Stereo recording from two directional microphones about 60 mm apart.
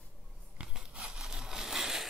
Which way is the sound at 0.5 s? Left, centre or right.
Centre.